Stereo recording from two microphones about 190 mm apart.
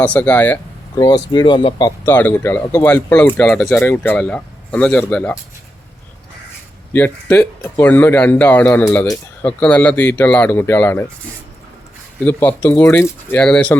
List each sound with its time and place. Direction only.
0.0 s speech: 5° left (ahead or behind)
0.9 s speech: 20° left (ahead or behind)
2.0 s speech: 10° left (ahead or behind)
6.9 s speech: 10° left (ahead or behind)
12.2 s speech: 10° left (ahead or behind)